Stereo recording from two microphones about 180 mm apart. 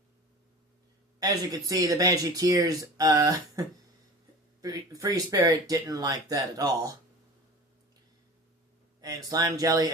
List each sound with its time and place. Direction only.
1.2 s speech: 20° right (ahead or behind)
9.0 s speech: 20° right (ahead or behind)